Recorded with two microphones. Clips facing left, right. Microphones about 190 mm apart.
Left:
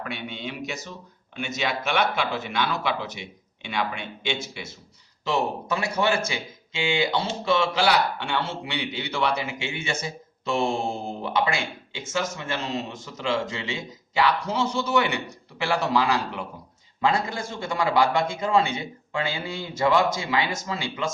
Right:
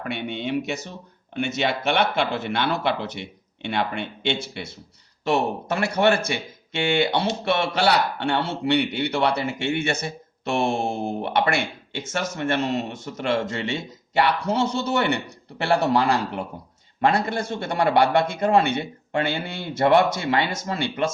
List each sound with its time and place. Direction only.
0.0 s speech: 55° right (ahead or behind)
5.2 s speech: 65° right (ahead or behind)